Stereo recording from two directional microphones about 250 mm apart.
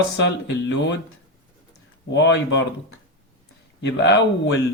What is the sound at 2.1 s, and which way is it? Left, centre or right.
Speech, left.